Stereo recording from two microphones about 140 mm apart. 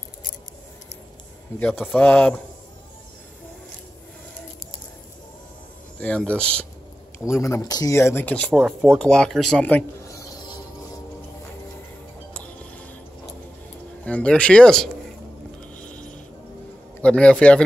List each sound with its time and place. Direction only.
2.0 s speech: 10° left (ahead or behind)
5.9 s speech: 10° left (ahead or behind)
7.2 s speech: 20° left (ahead or behind)
10.0 s a sound: 25° left (ahead or behind)
14.0 s speech: 10° left (ahead or behind)
15.7 s a sound: 10° left (ahead or behind)
17.0 s speech: 5° left (ahead or behind)